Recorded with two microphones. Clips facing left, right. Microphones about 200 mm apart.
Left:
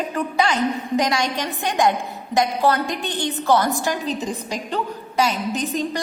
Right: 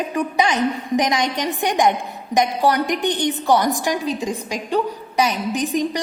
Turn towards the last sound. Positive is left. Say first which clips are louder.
# right 3 dB
turn(degrees=-15)  # may be behind; listen again after turning